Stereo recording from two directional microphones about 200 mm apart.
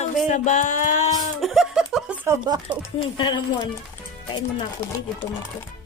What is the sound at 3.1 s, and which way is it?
Speech, 20° left (ahead or behind).